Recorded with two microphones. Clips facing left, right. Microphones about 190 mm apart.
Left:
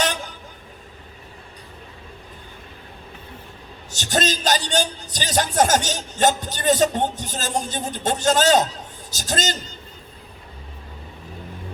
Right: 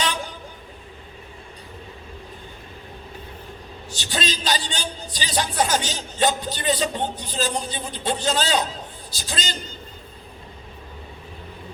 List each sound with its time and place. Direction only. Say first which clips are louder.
3.9 s a man's voice: left 5 dB; 45° left (ahead or behind)